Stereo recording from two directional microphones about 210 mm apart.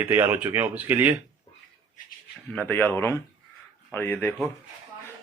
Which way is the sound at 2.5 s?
10° left (ahead or behind).